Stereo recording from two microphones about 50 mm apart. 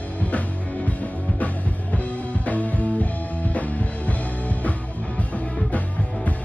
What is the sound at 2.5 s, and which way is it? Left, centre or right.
Music, left.